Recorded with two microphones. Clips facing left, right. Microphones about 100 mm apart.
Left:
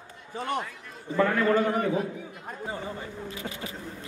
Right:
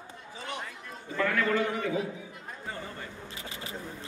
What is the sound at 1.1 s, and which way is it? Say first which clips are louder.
Speech: left 5 dB; 30° left (ahead or behind).